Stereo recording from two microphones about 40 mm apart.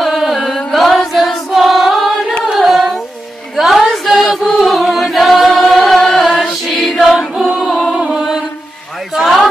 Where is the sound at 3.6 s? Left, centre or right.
Centre.